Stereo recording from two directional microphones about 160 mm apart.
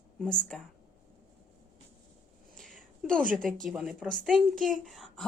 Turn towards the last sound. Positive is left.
turn(degrees=0)  # may be behind; listen again after turning